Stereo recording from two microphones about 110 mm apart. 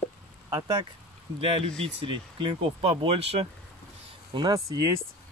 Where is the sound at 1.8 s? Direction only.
55° right (ahead or behind).